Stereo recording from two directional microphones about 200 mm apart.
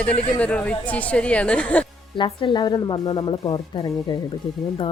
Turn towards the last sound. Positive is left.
turn(degrees=20)  # may be behind; listen again after turning